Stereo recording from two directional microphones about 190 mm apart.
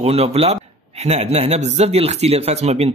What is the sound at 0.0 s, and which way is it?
Speech, 35° right (ahead or behind).